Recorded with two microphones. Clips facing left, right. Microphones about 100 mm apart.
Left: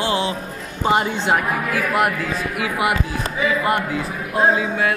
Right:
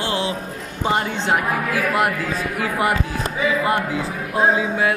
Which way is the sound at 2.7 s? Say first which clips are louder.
Even; 10° left (ahead or behind).